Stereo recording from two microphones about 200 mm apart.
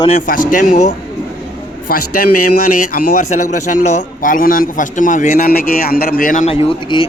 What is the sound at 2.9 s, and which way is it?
Speech, 40° left (ahead or behind).